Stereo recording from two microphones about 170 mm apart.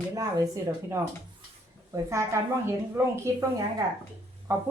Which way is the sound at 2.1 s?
15° right (ahead or behind).